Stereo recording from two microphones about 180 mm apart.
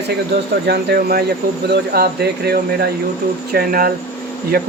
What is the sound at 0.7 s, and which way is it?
Speech, 60° right (ahead or behind).